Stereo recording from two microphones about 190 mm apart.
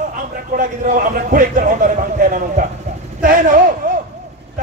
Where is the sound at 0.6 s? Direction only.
45° right (ahead or behind).